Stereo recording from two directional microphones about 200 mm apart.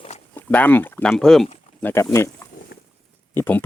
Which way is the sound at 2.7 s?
55° left (ahead or behind).